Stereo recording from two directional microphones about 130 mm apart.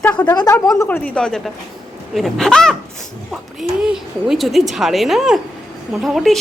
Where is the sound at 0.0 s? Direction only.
10° left (ahead or behind).